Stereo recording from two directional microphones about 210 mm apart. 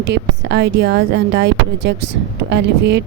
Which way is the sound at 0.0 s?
55° right (ahead or behind).